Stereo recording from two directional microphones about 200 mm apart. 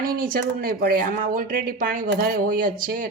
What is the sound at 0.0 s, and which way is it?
Speech, 45° right (ahead or behind).